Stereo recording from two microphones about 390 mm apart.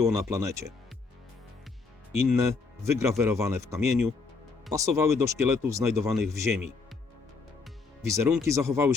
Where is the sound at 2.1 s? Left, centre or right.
Centre.